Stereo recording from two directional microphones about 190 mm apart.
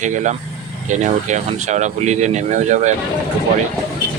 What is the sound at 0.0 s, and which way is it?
Speech, 40° right (ahead or behind).